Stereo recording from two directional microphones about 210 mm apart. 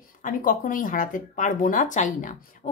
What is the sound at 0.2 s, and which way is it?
Speech, 40° left (ahead or behind).